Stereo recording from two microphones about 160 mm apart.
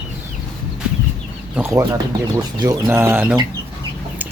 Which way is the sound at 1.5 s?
15° right (ahead or behind).